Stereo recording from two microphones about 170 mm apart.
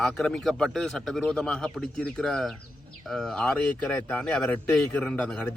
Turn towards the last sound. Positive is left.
turn(degrees=5)  # may be behind; listen again after turning